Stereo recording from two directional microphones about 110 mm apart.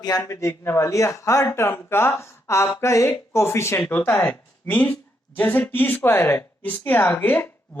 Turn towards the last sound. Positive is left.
turn(degrees=15)  # may be behind; listen again after turning